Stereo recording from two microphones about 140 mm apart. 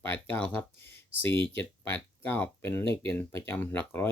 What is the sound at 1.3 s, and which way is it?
Speech, 35° right (ahead or behind).